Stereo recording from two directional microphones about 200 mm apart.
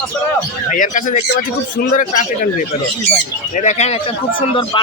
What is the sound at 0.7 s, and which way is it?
Speech, 40° left (ahead or behind).